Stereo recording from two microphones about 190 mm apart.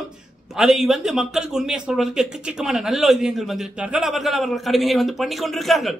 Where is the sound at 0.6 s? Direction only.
Centre (ahead or behind).